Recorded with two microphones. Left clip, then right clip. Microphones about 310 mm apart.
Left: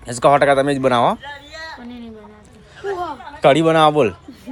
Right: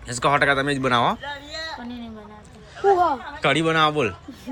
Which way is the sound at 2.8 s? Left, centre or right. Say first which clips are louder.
Right 7 dB; right.